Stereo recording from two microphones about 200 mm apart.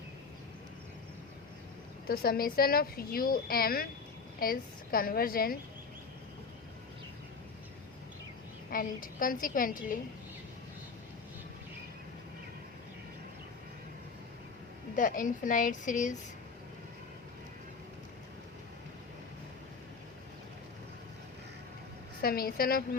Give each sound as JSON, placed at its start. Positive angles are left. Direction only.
{"t": 2.0, "sound": "a woman's voice", "side_deg": 50}
{"t": 8.7, "sound": "speech", "side_deg": 45}
{"t": 14.9, "sound": "a woman's voice", "side_deg": 40}
{"t": 22.2, "sound": "speech", "side_deg": 50}